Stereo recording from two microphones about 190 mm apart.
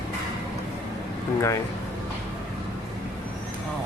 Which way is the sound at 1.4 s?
15° left (ahead or behind).